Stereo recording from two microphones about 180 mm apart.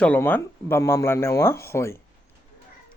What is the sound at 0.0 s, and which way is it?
Speech, 10° left (ahead or behind).